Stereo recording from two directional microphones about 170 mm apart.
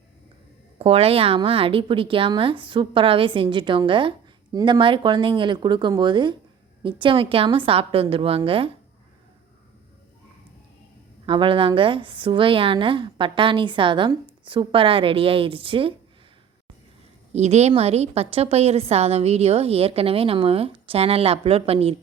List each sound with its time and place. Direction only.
0.8 s a woman's voice: 35° right (ahead or behind)
11.3 s a woman's voice: 30° right (ahead or behind)
17.3 s a woman's voice: 40° right (ahead or behind)